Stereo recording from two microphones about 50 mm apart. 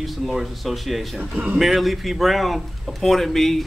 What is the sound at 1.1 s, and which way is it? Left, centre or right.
Speech, right.